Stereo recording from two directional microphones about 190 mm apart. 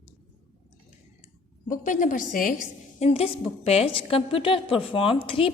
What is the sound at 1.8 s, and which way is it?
Speech, 40° left (ahead or behind).